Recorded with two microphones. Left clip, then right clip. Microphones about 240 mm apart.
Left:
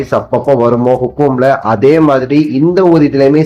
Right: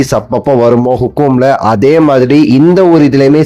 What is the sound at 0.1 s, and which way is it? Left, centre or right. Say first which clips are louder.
A man's voice: right 1 dB; right.